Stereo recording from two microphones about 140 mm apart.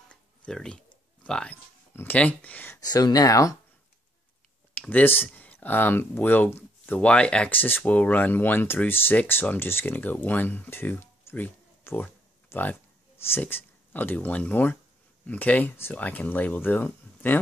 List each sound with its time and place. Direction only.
0.1 s speech: 5° left (ahead or behind)
2.8 s speech: 30° left (ahead or behind)
4.7 s speech: 10° left (ahead or behind)